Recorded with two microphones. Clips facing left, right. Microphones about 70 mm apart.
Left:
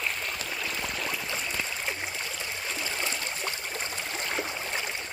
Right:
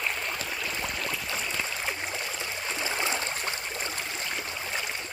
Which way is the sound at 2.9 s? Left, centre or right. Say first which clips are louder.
Right 3 dB; right.